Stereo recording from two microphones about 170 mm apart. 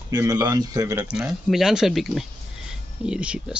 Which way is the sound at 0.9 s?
5° right (ahead or behind).